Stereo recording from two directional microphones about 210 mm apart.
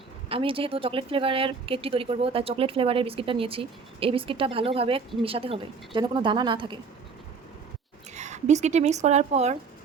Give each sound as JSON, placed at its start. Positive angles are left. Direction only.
{"t": 0.3, "sound": "speech", "side_deg": -25}
{"t": 8.1, "sound": "speech", "side_deg": -35}